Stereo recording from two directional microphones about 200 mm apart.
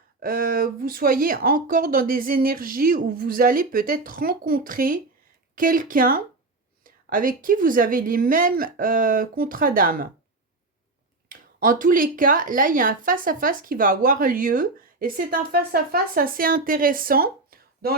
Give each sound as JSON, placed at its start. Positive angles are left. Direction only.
{"t": 0.2, "sound": "speech", "side_deg": -45}
{"t": 11.3, "sound": "speech", "side_deg": -45}